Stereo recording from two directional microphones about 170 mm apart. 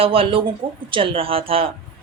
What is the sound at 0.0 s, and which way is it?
Speech, 35° right (ahead or behind).